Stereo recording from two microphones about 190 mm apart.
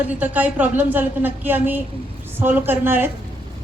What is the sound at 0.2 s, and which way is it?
A woman's voice, 10° right (ahead or behind).